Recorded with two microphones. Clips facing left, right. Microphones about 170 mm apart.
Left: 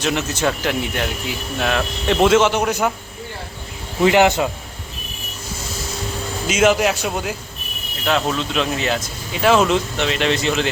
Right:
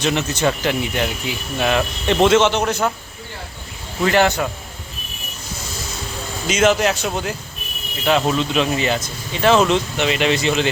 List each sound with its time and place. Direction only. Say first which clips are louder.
0.0 s speech: right 1 dB; 5° left (ahead or behind)
4.0 s a man's voice: left 2 dB; 15° left (ahead or behind)
6.5 s a man's voice: even; 5° left (ahead or behind)
8.0 s speech: right 2 dB; 5° right (ahead or behind)